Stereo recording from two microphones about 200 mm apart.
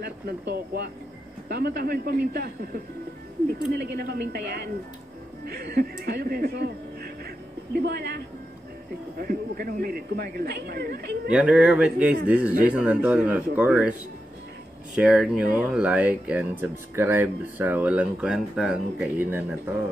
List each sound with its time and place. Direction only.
0.0 s speech: 55° right (ahead or behind)
9.2 s speech: 45° right (ahead or behind)
11.3 s speech: 5° right (ahead or behind)
15.0 s speech: 5° right (ahead or behind)